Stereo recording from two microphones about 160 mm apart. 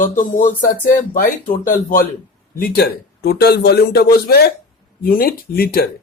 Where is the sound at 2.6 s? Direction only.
85° left.